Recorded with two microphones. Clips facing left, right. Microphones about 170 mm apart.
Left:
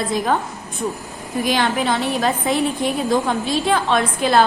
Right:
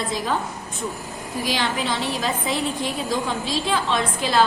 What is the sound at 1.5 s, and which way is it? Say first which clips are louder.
A woman's voice: left 5 dB; 55° left (ahead or behind).